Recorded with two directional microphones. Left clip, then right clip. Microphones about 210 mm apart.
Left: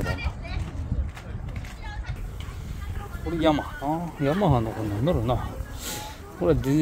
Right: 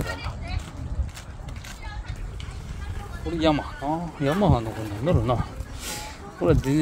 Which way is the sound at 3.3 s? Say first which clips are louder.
Even; centre (ahead or behind).